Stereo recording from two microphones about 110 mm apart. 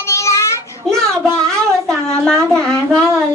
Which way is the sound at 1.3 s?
5° left (ahead or behind).